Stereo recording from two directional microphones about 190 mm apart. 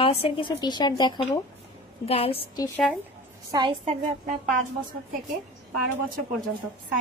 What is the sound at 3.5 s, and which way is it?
Speech, 25° right (ahead or behind).